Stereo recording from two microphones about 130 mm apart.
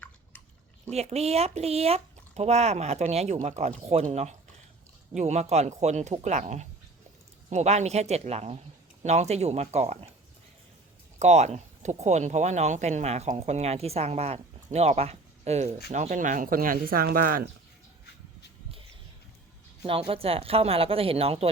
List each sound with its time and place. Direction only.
0.9 s speech: 55° right (ahead or behind)
11.2 s speech: 60° right (ahead or behind); by 17.4 s 90° right
19.8 s speech: 45° right (ahead or behind)